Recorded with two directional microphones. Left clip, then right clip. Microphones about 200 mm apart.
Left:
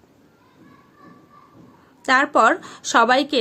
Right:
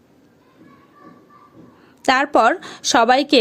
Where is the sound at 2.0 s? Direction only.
35° right (ahead or behind).